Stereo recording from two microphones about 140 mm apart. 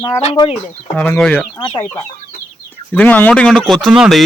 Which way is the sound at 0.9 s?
10° left (ahead or behind).